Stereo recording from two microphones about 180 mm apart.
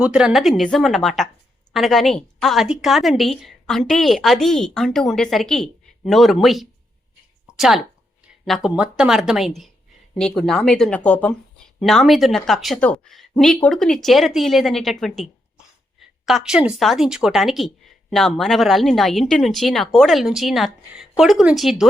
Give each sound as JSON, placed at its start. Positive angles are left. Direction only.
{"t": 0.0, "sound": "speech", "side_deg": -5}
{"t": 7.4, "sound": "a sound", "side_deg": 0}
{"t": 8.4, "sound": "speech", "side_deg": 0}